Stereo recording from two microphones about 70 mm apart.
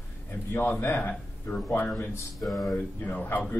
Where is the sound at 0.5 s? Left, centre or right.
Left.